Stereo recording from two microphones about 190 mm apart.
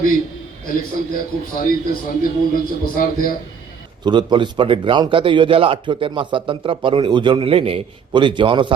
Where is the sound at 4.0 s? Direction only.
25° right (ahead or behind).